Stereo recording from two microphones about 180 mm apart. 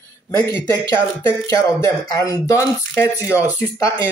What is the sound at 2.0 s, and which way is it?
Speech, 20° left (ahead or behind).